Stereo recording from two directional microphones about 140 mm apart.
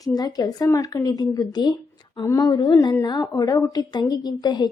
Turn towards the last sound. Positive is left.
turn(degrees=30)  # may be behind; listen again after turning